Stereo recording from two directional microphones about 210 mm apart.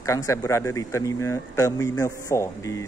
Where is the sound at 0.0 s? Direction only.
15° left (ahead or behind).